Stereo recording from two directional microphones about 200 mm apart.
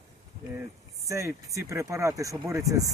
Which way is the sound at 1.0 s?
15° right (ahead or behind).